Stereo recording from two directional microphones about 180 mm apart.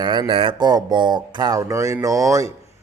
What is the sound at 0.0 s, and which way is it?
Speech, 25° right (ahead or behind).